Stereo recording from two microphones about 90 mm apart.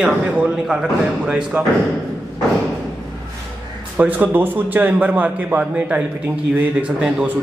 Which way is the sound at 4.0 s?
20° right (ahead or behind).